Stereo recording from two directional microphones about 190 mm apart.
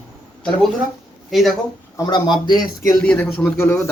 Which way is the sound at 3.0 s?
5° left (ahead or behind).